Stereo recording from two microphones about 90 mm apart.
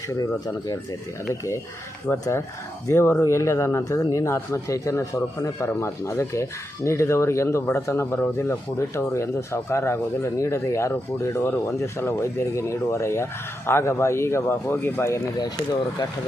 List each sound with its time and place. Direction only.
0.1 s speech: 40° left (ahead or behind)
2.1 s speech: 25° left (ahead or behind)
15.4 s speech: 50° left (ahead or behind)